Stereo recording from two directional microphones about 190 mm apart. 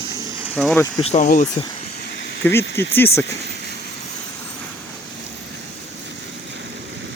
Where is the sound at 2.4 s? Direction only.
10° left (ahead or behind).